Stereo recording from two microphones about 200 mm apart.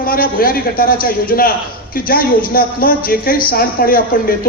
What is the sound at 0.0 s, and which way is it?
Speech, 45° left (ahead or behind).